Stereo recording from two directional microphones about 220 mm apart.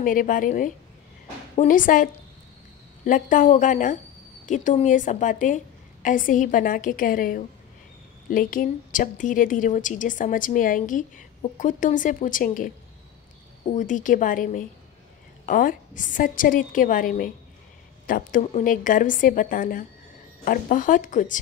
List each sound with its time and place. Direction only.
0.0 s a woman's voice: 40° left (ahead or behind)
3.1 s a woman's voice: 35° left (ahead or behind)